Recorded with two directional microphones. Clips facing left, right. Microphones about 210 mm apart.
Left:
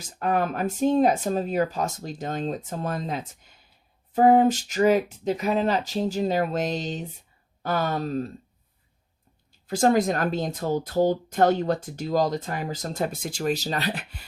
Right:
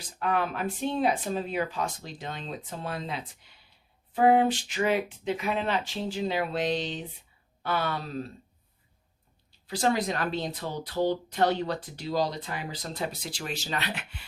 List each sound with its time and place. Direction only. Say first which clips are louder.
0.0 s speech: left 4 dB; 45° left (ahead or behind)
9.5 s speech: left 6 dB; 50° left (ahead or behind)